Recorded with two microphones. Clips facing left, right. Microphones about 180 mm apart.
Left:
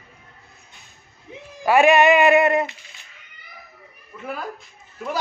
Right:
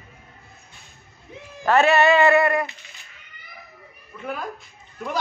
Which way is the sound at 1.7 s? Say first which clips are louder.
Left 2 dB; 15° left (ahead or behind).